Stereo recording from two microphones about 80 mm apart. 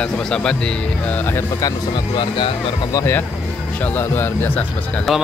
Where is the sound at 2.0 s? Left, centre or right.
Left.